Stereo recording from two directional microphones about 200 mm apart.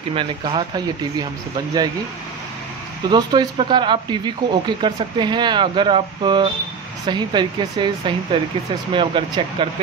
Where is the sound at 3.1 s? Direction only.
20° right (ahead or behind).